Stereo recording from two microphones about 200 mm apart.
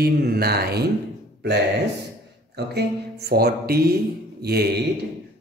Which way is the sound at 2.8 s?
55° right (ahead or behind).